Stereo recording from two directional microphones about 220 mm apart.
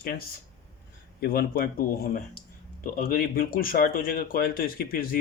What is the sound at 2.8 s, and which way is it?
Speech, 40° left (ahead or behind).